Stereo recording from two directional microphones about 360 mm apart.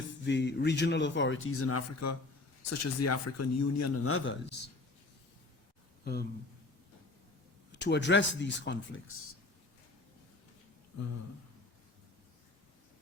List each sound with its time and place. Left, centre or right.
0.3 s a man's voice: left
6.0 s speech: left
7.7 s a man's voice: left